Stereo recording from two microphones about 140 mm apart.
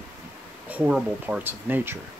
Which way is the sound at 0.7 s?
10° right (ahead or behind).